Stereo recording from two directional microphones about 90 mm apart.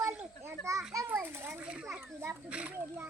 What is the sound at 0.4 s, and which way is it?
Children playing, 35° right (ahead or behind).